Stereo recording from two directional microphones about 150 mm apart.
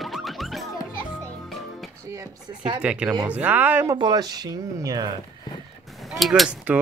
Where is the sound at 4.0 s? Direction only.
25° right (ahead or behind).